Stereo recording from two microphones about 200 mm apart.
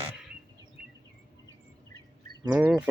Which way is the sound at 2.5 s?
5° right (ahead or behind).